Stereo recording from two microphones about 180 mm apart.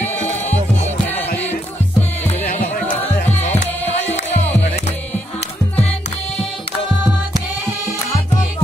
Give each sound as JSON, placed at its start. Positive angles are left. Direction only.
{"t": 0.5, "sound": "music", "side_deg": 35}
{"t": 2.2, "sound": "music", "side_deg": 40}